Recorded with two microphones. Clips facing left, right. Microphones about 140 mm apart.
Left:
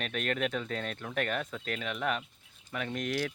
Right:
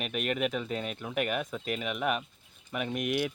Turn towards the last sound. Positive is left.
turn(degrees=-15)  # may be behind; listen again after turning